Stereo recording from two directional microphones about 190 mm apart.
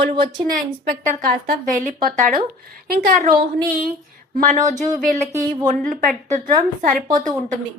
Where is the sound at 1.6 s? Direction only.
40° right (ahead or behind).